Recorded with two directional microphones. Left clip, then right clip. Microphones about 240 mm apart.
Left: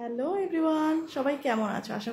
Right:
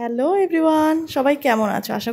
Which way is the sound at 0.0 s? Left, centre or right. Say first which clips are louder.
Right 11 dB; right.